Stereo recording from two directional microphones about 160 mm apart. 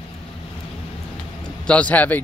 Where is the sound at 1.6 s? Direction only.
10° left (ahead or behind).